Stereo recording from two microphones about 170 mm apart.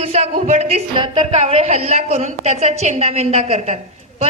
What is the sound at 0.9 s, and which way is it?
A woman's voice, 30° right (ahead or behind).